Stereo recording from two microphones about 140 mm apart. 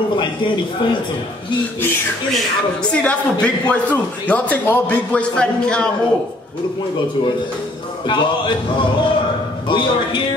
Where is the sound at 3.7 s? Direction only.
10° left (ahead or behind).